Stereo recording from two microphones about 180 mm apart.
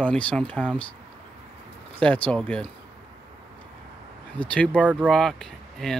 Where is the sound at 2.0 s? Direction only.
5° left (ahead or behind).